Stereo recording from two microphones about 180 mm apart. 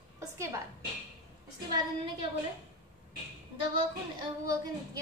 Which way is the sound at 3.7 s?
25° right (ahead or behind).